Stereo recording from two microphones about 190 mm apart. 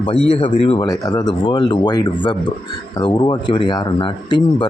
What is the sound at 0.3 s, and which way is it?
Speech, 30° left (ahead or behind).